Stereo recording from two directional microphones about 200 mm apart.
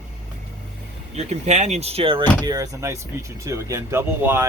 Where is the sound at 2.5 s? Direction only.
15° right (ahead or behind).